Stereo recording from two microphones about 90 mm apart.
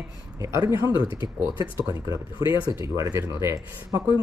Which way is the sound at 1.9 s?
35° right (ahead or behind).